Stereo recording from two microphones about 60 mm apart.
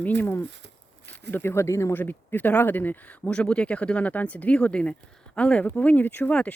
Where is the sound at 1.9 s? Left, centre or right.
Left.